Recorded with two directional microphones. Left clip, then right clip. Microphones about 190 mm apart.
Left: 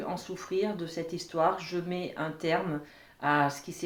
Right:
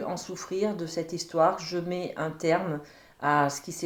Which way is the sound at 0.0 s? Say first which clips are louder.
Right 2 dB; 45° right (ahead or behind).